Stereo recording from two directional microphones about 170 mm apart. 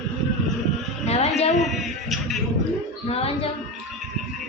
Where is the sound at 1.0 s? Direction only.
40° left (ahead or behind).